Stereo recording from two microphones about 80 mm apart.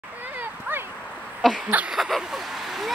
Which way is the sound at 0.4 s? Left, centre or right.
Right.